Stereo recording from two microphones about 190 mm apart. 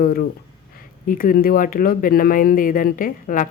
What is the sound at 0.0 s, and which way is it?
Speech, 50° left (ahead or behind).